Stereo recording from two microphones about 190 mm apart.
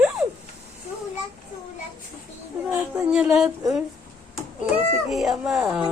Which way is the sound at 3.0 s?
5° right (ahead or behind).